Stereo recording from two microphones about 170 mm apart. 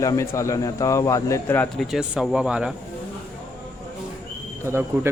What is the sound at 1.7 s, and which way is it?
Speech, centre (ahead or behind).